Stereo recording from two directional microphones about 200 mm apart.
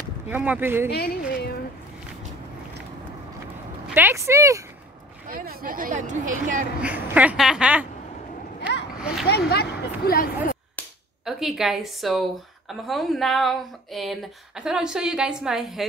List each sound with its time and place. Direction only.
0.3 s a woman's voice: 10° right (ahead or behind)
0.8 s speech: 50° left (ahead or behind)
3.9 s a woman's voice: 10° right (ahead or behind)
5.3 s speech: 45° right (ahead or behind)
6.8 s a woman's voice: 5° right (ahead or behind)
8.5 s a sound: 60° left (ahead or behind)
9.3 s a woman's voice: 55° left (ahead or behind)
10.8 s speech: centre (ahead or behind)